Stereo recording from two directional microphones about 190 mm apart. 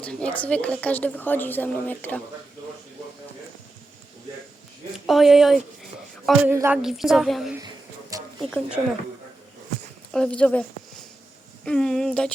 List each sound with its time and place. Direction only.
0.0 s a woman's voice: 5° left (ahead or behind)
4.9 s speech: centre (ahead or behind)
8.1 s a sound: 20° right (ahead or behind)
8.4 s speech: centre (ahead or behind)
10.1 s speech: 5° left (ahead or behind)